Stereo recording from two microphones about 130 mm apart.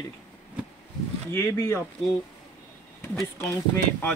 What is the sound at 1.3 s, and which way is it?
Speech, 20° left (ahead or behind).